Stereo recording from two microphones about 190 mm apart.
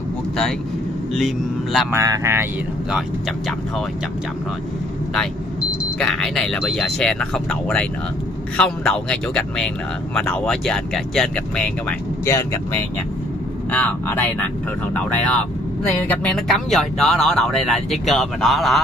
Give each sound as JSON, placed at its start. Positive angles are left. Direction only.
{"t": 1.1, "sound": "speech", "side_deg": 0}
{"t": 1.9, "sound": "speech", "side_deg": -15}
{"t": 5.9, "sound": "speech", "side_deg": 0}
{"t": 12.3, "sound": "speech", "side_deg": 15}
{"t": 16.1, "sound": "speech", "side_deg": 5}